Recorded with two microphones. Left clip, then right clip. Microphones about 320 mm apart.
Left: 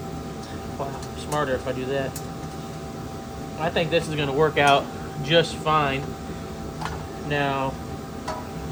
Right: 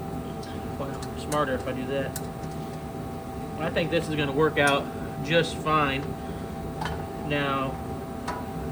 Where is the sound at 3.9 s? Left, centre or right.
Centre.